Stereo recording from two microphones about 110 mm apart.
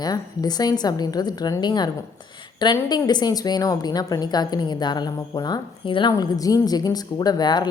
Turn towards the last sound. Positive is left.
turn(degrees=40)  # may be behind; listen again after turning